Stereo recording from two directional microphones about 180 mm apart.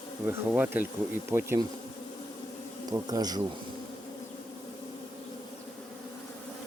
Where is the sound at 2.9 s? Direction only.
20° right (ahead or behind).